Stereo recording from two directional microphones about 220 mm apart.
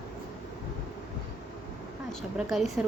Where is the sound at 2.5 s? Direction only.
Centre (ahead or behind).